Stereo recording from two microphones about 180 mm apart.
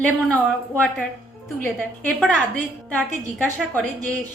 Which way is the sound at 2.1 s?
5° left (ahead or behind).